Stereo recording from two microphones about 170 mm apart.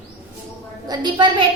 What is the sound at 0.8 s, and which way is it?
Speech, 25° right (ahead or behind).